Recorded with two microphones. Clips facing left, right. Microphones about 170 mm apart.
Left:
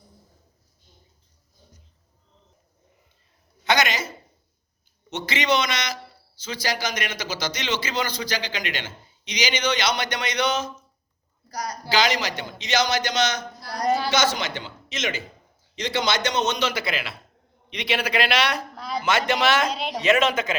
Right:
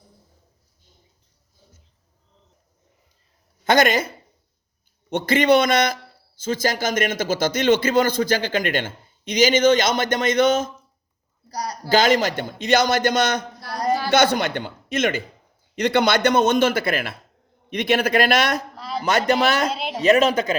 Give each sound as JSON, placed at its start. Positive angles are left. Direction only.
{"t": 3.6, "sound": "speech", "side_deg": -50}
{"t": 5.1, "sound": "speech", "side_deg": -55}
{"t": 11.5, "sound": "speech", "side_deg": -30}
{"t": 11.9, "sound": "speech", "side_deg": -50}
{"t": 18.8, "sound": "a sound", "side_deg": 0}
{"t": 19.3, "sound": "speech", "side_deg": -40}
{"t": 19.7, "sound": "speech", "side_deg": -5}
{"t": 20.0, "sound": "speech", "side_deg": -35}